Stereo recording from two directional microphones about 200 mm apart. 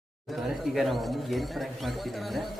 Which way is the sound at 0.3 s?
Centre (ahead or behind).